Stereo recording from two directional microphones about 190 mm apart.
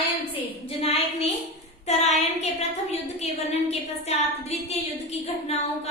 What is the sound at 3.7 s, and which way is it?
A woman's voice, 35° left (ahead or behind).